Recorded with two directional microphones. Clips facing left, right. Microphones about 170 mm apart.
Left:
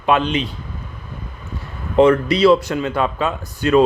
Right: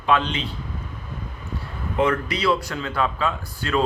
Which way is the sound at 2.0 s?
25° left (ahead or behind).